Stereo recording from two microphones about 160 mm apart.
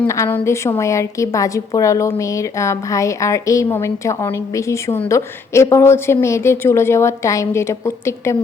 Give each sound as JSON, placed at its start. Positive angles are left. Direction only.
{"t": 0.0, "sound": "a woman's voice", "side_deg": 15}